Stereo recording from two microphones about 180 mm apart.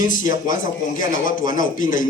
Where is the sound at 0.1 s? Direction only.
45° left (ahead or behind).